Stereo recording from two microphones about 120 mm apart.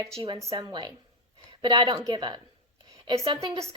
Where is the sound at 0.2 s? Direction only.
35° right (ahead or behind).